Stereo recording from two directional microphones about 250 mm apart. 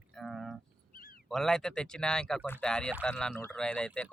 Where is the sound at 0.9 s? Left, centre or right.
Left.